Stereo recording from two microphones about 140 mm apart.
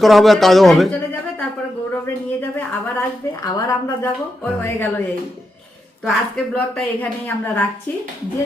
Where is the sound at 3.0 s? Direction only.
20° left (ahead or behind).